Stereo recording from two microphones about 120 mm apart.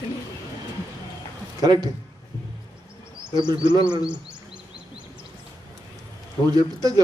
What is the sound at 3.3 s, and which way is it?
Speech, 40° right (ahead or behind).